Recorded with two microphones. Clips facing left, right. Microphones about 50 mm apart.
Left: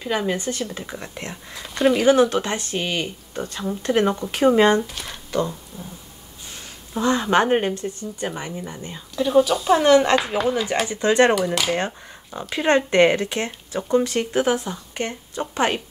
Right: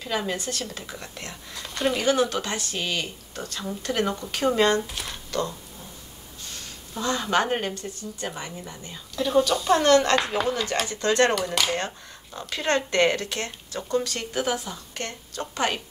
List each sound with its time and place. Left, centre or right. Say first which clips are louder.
0.0 s speech: left 5 dB; centre
1.5 s speech: left 7 dB; centre
2.0 s speech: left 6 dB; centre
4.8 s speech: left 1 dB; centre
5.3 s speech: left 5 dB; centre
9.1 s speech: left 4 dB; centre
11.3 s speech: left 4 dB; centre
12.4 s speech: left 6 dB; centre